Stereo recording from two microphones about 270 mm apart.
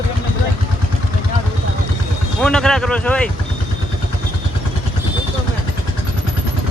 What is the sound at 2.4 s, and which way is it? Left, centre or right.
Speech, centre.